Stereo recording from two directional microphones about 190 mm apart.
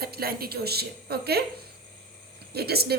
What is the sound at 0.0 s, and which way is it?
A woman's voice, 55° right (ahead or behind).